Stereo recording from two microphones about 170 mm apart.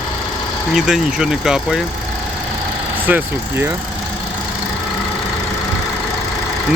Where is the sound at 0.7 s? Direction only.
5° right (ahead or behind).